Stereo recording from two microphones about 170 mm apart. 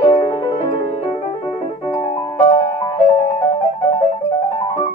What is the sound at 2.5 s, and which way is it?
Music, 20° left (ahead or behind).